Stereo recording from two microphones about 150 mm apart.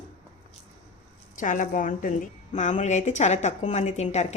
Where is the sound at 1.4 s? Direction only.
60° left (ahead or behind).